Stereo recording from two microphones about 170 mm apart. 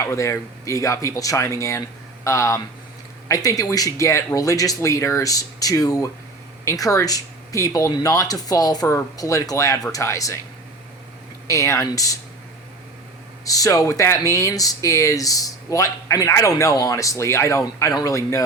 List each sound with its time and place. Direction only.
0.0 s speech: 15° left (ahead or behind)
11.4 s speech: 15° left (ahead or behind)
13.4 s speech: 20° left (ahead or behind)